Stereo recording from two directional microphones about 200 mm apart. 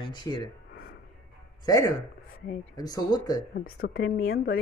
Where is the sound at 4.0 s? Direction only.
75° left (ahead or behind).